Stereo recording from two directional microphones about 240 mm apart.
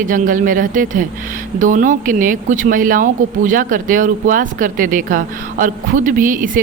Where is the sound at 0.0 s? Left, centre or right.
Right.